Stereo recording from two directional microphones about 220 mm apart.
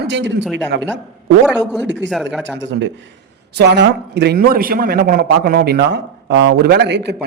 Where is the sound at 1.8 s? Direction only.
55° right (ahead or behind).